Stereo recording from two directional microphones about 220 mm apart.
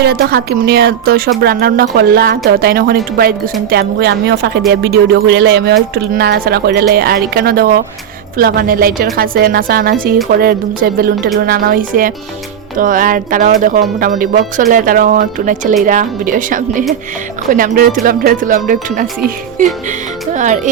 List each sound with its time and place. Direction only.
0.0 s speech: 45° right (ahead or behind)
20.3 s speech: 35° right (ahead or behind)